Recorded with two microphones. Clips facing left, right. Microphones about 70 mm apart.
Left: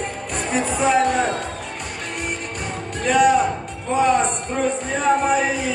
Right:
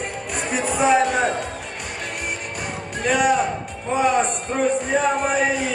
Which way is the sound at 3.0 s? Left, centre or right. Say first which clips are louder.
Left 3 dB; centre.